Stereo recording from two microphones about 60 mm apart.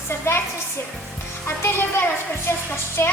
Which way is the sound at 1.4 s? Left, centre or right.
Left.